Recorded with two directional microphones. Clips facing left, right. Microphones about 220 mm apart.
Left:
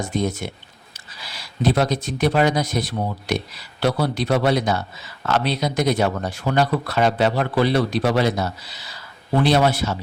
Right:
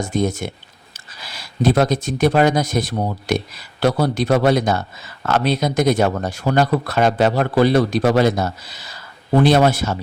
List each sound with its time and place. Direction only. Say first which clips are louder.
0.0 s speech: right 3 dB; 45° right (ahead or behind)